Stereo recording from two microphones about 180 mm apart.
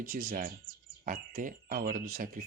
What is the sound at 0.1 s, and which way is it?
Speech, 50° right (ahead or behind).